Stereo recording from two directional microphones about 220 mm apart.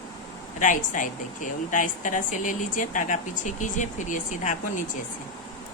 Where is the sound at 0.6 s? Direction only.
35° left (ahead or behind).